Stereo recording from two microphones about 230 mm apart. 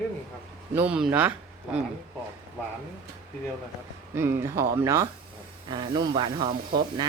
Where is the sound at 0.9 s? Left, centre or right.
Centre.